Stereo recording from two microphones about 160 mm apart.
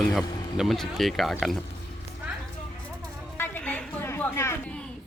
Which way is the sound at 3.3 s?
10° left (ahead or behind).